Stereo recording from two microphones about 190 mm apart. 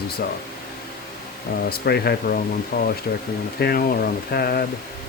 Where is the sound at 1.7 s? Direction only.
55° left (ahead or behind).